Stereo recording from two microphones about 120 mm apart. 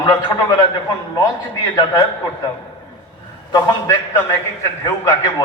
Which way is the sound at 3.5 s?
35° left (ahead or behind).